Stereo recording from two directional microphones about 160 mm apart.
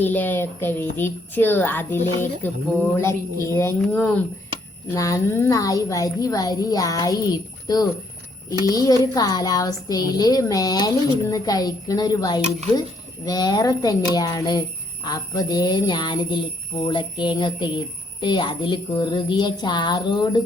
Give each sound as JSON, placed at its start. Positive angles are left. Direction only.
{"t": 0.0, "sound": "a woman's voice", "side_deg": 10}